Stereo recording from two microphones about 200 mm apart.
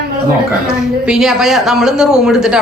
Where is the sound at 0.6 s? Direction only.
5° right (ahead or behind).